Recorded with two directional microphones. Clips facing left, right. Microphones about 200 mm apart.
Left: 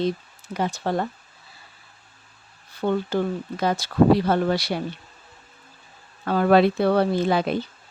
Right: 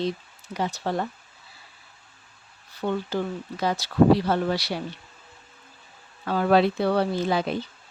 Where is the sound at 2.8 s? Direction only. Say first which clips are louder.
Left 4 dB; 55° left (ahead or behind).